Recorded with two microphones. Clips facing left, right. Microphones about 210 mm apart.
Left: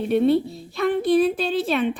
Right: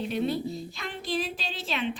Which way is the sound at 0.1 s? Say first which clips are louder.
Left 13 dB; 60° left (ahead or behind).